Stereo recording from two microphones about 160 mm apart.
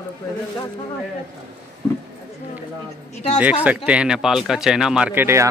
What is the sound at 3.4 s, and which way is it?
Speech, 10° right (ahead or behind).